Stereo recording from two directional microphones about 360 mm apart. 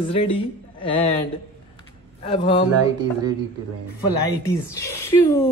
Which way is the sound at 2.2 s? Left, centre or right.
Centre.